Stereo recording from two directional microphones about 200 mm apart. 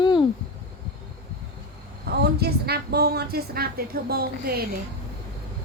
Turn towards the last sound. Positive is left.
turn(degrees=-50)  # may be behind; listen again after turning